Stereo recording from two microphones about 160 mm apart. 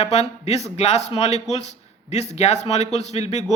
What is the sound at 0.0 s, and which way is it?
Speech, 40° left (ahead or behind).